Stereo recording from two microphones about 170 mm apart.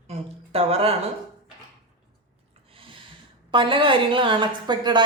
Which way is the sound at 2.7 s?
30° right (ahead or behind).